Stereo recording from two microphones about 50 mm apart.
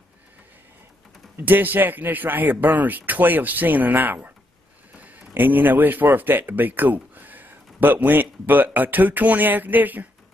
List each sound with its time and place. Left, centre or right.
1.4 s speech: right
5.3 s speech: right